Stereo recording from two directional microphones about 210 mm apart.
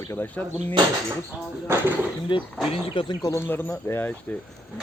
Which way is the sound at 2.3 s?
20° left (ahead or behind).